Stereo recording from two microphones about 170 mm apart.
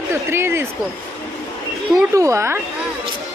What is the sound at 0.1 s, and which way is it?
Speech, 15° right (ahead or behind).